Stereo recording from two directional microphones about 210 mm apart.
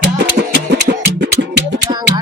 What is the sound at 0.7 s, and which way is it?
Music, 55° right (ahead or behind).